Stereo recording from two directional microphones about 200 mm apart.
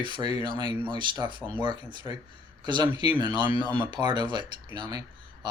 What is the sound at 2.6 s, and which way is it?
Speech, 20° right (ahead or behind).